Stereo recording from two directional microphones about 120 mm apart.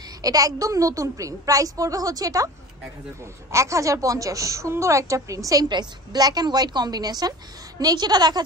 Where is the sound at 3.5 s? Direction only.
25° right (ahead or behind).